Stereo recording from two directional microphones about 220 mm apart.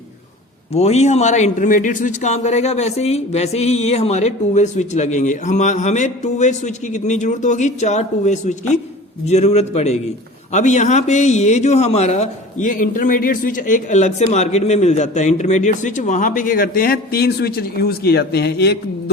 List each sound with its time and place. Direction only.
0.7 s a man's voice: 30° left (ahead or behind); by 19.1 s 50° left (ahead or behind)